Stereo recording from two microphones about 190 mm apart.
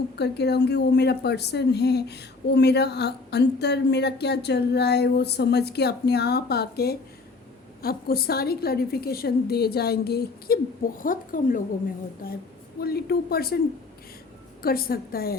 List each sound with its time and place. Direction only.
0.2 s a woman's voice: 60° left (ahead or behind)
14.6 s a woman's voice: 50° left (ahead or behind)